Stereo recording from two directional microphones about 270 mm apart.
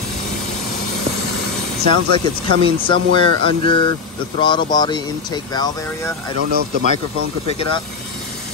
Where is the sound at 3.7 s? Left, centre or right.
Centre.